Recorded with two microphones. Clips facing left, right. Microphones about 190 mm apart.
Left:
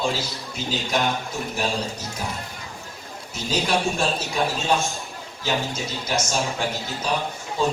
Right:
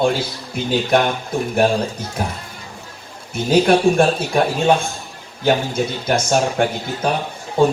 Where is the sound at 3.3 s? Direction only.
55° right (ahead or behind).